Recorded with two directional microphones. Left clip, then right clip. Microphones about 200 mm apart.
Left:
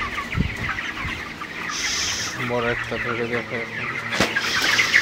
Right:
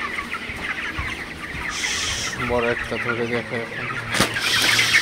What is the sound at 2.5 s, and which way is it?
Speech, 10° right (ahead or behind).